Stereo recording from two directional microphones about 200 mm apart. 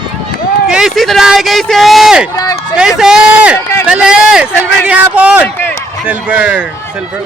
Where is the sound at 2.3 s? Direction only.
20° left (ahead or behind).